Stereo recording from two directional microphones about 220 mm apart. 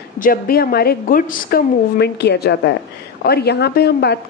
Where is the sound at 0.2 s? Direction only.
40° left (ahead or behind).